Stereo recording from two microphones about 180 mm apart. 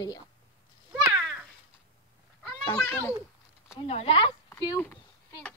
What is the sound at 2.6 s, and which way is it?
Speech, 15° left (ahead or behind).